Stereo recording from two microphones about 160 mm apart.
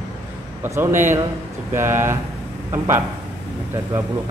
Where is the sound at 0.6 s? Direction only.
15° right (ahead or behind).